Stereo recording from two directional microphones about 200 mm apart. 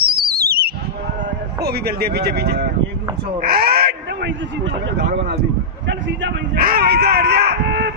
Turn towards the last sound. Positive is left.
turn(degrees=-60)  # may be behind; listen again after turning